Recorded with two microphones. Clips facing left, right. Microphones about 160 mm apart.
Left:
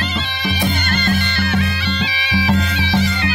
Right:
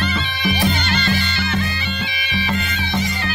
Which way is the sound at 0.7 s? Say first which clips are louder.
Left 1 dB; 50° left (ahead or behind).